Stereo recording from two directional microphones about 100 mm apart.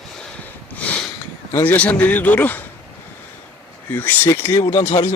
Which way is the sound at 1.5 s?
20° left (ahead or behind).